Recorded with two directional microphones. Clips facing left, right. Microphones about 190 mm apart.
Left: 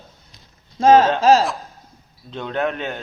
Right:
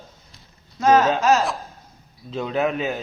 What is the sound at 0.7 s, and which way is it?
Speech, 30° left (ahead or behind).